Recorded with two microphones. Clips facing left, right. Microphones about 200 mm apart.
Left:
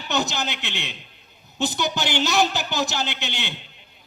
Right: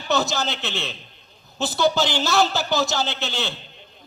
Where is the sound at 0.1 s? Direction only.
15° left (ahead or behind).